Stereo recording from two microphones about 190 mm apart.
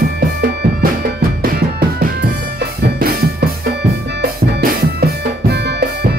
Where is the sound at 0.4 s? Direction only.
55° right (ahead or behind).